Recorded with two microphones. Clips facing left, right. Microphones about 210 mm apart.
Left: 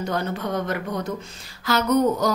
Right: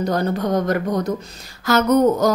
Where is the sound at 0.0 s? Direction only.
35° right (ahead or behind).